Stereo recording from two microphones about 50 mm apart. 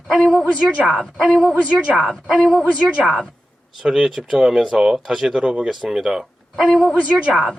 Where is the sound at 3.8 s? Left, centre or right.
Centre.